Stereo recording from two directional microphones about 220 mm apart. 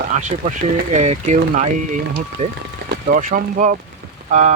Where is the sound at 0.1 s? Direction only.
35° right (ahead or behind).